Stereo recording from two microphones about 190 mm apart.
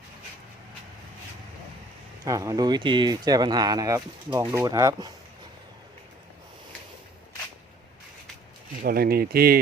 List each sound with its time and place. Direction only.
2.2 s speech: 15° right (ahead or behind)
8.8 s speech: 55° right (ahead or behind)